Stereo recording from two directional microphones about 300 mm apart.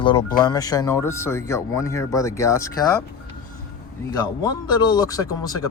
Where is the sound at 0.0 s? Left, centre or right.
Centre.